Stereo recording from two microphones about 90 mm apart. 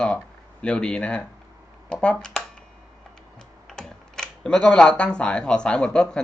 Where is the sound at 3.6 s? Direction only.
5° left (ahead or behind).